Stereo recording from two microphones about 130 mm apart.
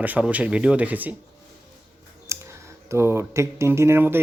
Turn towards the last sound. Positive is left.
turn(degrees=-15)  # may be behind; listen again after turning